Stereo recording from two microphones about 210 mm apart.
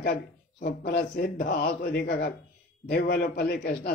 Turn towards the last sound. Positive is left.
turn(degrees=45)  # may be behind; listen again after turning